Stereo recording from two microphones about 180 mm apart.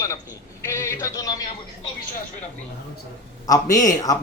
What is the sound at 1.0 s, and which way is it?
Speech, 20° left (ahead or behind).